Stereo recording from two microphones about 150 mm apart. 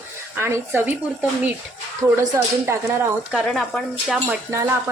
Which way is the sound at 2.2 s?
20° right (ahead or behind).